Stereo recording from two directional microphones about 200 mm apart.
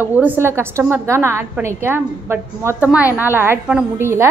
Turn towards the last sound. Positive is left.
turn(degrees=-10)  # may be behind; listen again after turning